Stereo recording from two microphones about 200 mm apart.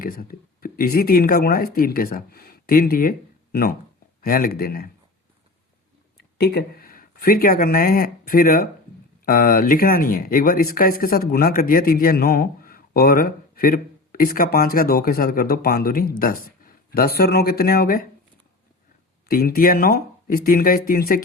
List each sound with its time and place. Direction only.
0.0 s speech: 45° left (ahead or behind)
6.1 s speech: 55° left (ahead or behind)
19.3 s speech: 45° left (ahead or behind)